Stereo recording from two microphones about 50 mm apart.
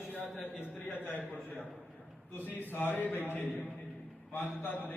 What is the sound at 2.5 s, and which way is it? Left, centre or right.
Speech, left.